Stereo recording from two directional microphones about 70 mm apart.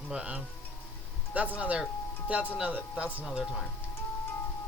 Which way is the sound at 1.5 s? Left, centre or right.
Centre.